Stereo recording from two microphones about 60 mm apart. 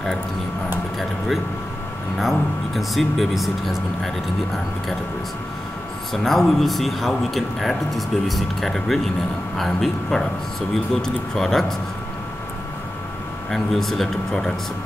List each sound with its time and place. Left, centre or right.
2.1 s speech: centre
6.1 s speech: centre
13.5 s speech: centre